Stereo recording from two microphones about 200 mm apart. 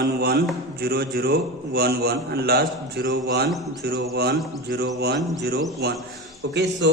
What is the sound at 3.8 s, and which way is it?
A man's voice, 55° right (ahead or behind).